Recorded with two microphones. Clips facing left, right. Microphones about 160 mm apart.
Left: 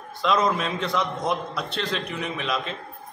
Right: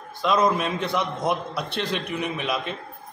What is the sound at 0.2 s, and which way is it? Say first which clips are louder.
A man's voice: right 1 dB; 5° right (ahead or behind).